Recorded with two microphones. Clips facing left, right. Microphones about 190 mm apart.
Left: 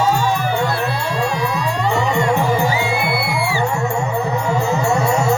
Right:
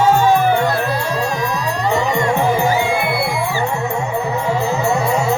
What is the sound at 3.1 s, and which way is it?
Music, 10° left (ahead or behind).